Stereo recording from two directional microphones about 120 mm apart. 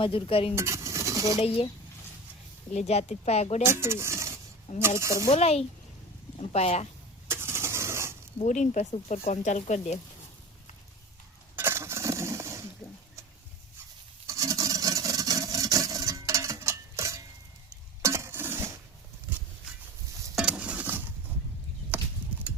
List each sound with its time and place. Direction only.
0.0 s speech: 50° left (ahead or behind)
0.5 s stir: 25° right (ahead or behind)
1.4 s speech: 50° left (ahead or behind)
2.7 s a woman's voice: 65° left (ahead or behind)
3.6 s speech: 20° right (ahead or behind)
5.3 s a woman's voice: 60° left (ahead or behind)
7.3 s vehicle: 20° right (ahead or behind)
8.4 s speech: 90° left; by 10.0 s 70° left (ahead or behind)
11.5 s a sound: 20° right (ahead or behind)
14.3 s vehicle: 30° right (ahead or behind)
18.0 s a sound: 25° right (ahead or behind)
20.3 s patter: 5° right (ahead or behind)
21.9 s horse: 15° right (ahead or behind)